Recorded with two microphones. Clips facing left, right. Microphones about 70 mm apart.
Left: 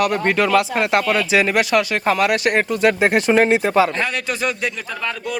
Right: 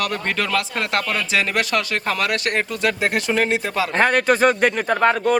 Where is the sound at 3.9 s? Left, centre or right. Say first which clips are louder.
Right 6 dB; right.